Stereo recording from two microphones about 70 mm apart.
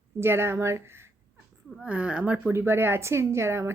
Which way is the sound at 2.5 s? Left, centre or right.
Right.